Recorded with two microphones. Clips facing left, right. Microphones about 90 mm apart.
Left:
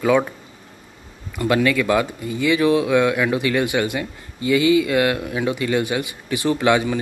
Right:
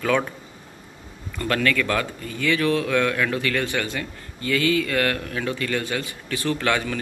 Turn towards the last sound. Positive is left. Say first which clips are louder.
# left 6 dB
turn(degrees=15)  # may be behind; listen again after turning